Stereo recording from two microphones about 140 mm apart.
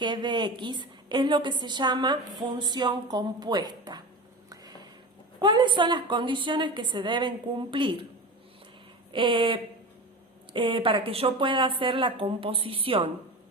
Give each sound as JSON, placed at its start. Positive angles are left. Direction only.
{"t": 0.0, "sound": "a woman's voice", "side_deg": -35}
{"t": 4.4, "sound": "a sound", "side_deg": -30}
{"t": 5.4, "sound": "a woman's voice", "side_deg": -35}
{"t": 9.1, "sound": "a woman's voice", "side_deg": -35}